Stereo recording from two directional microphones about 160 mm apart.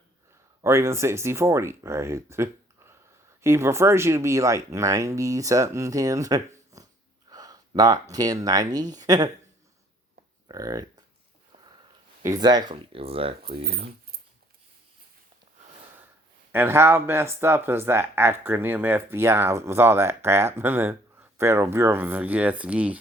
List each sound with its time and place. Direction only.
0.6 s speech: 15° right (ahead or behind)
10.5 s speech: 20° right (ahead or behind)
12.2 s speech: 25° right (ahead or behind); by 13.9 s 40° right (ahead or behind)
16.5 s speech: 15° right (ahead or behind)